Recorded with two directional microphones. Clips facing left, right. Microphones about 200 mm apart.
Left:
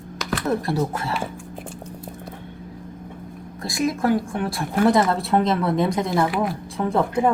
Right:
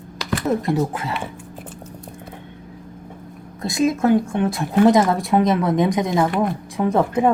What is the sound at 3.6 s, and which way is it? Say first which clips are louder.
Speech: right 4 dB; 25° right (ahead or behind).